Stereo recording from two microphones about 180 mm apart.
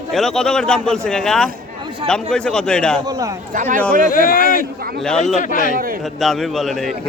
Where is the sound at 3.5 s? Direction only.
45° right (ahead or behind).